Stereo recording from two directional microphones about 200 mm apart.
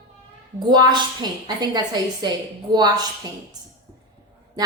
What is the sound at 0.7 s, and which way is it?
A woman's voice, 20° right (ahead or behind).